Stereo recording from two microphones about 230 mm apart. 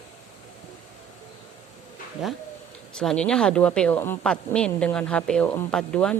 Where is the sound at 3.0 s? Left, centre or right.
Centre.